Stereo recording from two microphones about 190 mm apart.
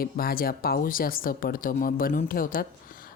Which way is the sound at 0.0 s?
50° left (ahead or behind).